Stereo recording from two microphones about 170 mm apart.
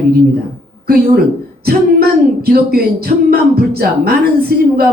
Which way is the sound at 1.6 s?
60° right (ahead or behind).